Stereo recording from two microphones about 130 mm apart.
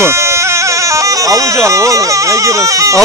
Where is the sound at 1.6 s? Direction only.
25° right (ahead or behind).